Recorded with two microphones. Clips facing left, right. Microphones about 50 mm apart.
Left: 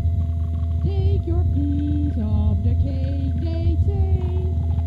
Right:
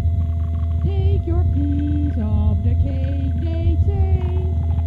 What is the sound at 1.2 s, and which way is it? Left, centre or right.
Music, right.